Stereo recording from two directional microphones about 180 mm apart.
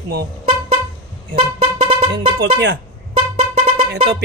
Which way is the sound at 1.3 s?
30° right (ahead or behind).